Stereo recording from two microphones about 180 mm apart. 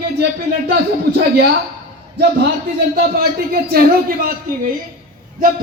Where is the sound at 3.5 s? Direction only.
55° right (ahead or behind).